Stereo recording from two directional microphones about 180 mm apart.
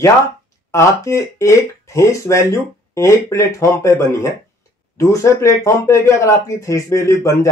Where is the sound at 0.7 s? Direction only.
15° left (ahead or behind).